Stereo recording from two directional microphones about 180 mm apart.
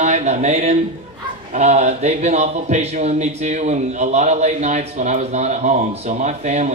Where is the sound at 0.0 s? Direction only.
40° right (ahead or behind).